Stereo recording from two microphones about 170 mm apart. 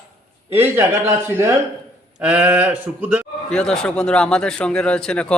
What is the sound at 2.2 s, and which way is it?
Speech, 5° right (ahead or behind).